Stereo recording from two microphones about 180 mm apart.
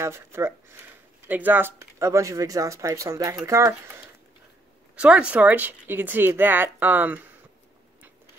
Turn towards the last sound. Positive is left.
turn(degrees=-10)  # may be behind; listen again after turning